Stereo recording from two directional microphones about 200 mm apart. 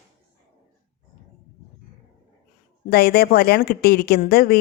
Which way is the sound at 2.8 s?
50° left (ahead or behind).